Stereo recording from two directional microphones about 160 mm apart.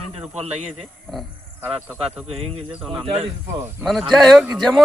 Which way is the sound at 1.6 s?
5° right (ahead or behind).